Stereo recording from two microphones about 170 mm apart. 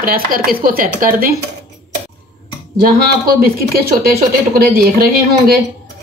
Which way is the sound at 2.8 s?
60° right (ahead or behind).